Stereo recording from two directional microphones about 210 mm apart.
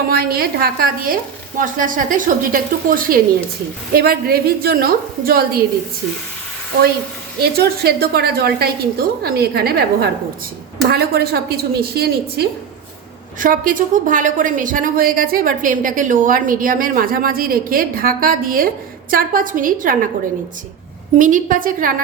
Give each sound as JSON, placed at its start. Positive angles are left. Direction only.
{"t": 0.1, "sound": "a woman's voice", "side_deg": -45}
{"t": 7.3, "sound": "a woman's voice", "side_deg": -50}
{"t": 21.2, "sound": "a woman's voice", "side_deg": -40}